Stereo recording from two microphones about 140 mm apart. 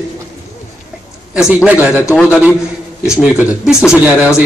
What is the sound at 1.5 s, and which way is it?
Speech, 10° right (ahead or behind).